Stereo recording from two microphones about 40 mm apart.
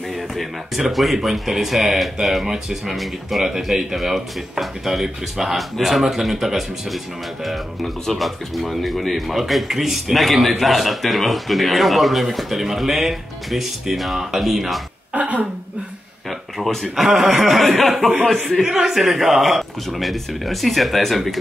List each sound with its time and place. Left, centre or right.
0.4 s speech: centre
15.1 s speech: right
16.9 s speech: centre
18.7 s speech: centre